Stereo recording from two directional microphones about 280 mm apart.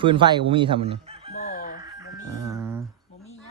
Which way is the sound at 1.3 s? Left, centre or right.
Left.